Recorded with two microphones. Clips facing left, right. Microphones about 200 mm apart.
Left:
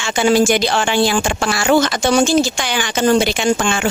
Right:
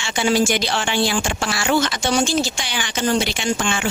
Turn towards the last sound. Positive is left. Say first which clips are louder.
# left 5 dB
turn(degrees=45)  # may be behind; listen again after turning